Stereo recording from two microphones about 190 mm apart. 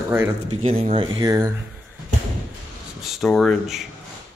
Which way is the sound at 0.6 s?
35° right (ahead or behind).